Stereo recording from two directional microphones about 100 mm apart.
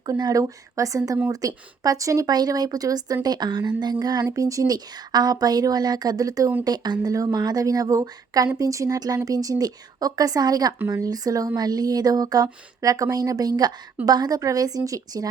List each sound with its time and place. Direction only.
0.0 s speech: 40° right (ahead or behind)
4.2 s speech: 35° right (ahead or behind)
10.8 s speech: 30° right (ahead or behind)